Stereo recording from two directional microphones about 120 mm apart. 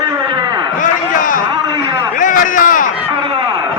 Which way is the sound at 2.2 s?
90° left.